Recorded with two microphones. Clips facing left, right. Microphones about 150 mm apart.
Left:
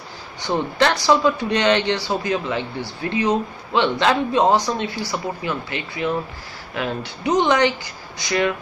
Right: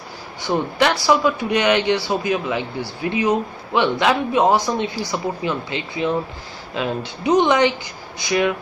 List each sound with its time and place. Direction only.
0.5 s a man's voice: 15° right (ahead or behind)